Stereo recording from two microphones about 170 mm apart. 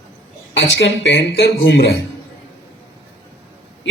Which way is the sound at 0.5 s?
90° left.